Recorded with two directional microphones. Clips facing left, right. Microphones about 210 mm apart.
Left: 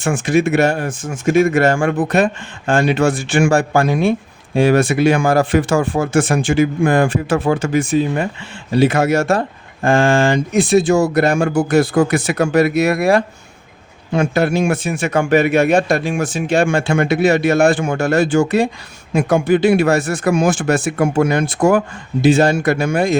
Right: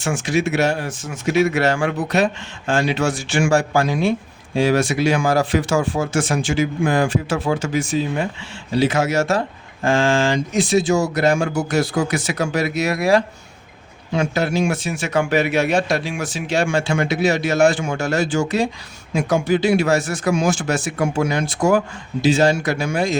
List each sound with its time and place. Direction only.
0.0 s speech: 55° left (ahead or behind)